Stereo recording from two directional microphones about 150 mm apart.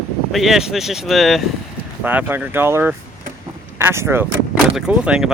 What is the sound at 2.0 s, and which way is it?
Speech, 10° right (ahead or behind).